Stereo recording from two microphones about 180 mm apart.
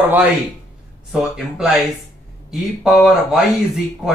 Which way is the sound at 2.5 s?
Centre (ahead or behind).